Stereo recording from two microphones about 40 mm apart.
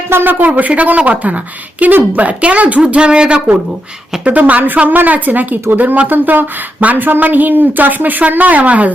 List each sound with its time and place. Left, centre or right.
0.1 s speech: right
0.4 s a woman's voice: right
1.9 s a woman's voice: right
2.2 s a woman's voice: right
2.8 s speech: right
4.3 s a woman's voice: right